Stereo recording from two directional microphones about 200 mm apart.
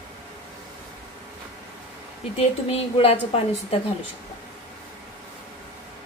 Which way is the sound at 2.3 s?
30° left (ahead or behind).